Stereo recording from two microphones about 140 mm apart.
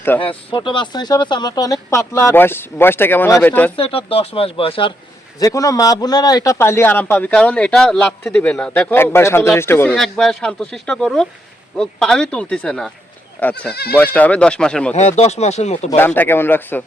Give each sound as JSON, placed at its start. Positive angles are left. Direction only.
{"t": 0.2, "sound": "speech", "side_deg": 35}
{"t": 3.8, "sound": "speech", "side_deg": 40}
{"t": 5.4, "sound": "a man's voice", "side_deg": 25}
{"t": 9.9, "sound": "a man's voice", "side_deg": 5}
{"t": 14.9, "sound": "speech", "side_deg": 55}
{"t": 16.0, "sound": "a man's voice", "side_deg": 15}